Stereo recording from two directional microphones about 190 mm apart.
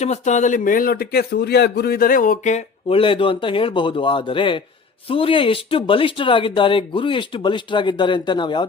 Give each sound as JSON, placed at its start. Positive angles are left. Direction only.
{"t": 0.0, "sound": "a man's voice", "side_deg": 35}